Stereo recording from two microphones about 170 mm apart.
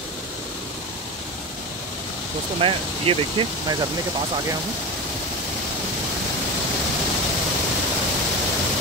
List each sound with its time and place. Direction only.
2.6 s speech: 30° right (ahead or behind)